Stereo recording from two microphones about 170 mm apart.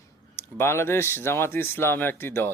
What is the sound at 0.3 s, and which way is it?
Speech, 15° left (ahead or behind).